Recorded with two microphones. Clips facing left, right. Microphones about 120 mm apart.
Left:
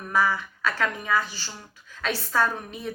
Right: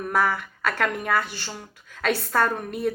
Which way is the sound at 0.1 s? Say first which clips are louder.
Even; 55° right (ahead or behind).